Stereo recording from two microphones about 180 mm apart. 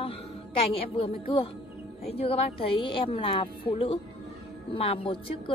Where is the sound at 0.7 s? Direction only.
30° left (ahead or behind).